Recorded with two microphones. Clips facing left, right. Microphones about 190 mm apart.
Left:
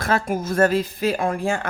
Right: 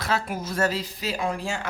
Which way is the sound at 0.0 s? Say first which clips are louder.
Left 5 dB; 50° left (ahead or behind).